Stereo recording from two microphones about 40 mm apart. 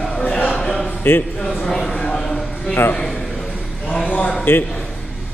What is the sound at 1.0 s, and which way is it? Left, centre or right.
Speech, left.